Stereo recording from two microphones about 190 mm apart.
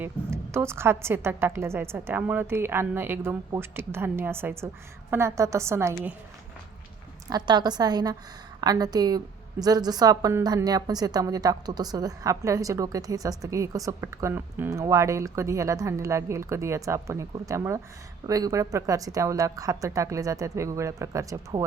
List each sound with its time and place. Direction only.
0.0 s a woman's voice: 15° right (ahead or behind)
7.3 s a woman's voice: 20° right (ahead or behind)